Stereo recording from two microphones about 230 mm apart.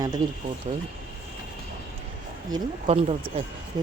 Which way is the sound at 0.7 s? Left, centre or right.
Right.